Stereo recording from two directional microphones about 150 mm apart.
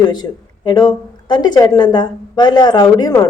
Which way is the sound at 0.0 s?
30° left (ahead or behind).